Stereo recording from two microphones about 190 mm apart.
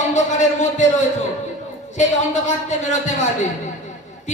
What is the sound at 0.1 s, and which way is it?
Speech, 40° left (ahead or behind).